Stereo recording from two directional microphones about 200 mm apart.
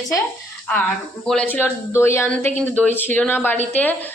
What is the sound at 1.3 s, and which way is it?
Speech, 5° left (ahead or behind).